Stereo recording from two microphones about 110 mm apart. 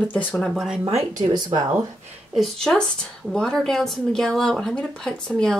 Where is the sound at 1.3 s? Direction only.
40° right (ahead or behind).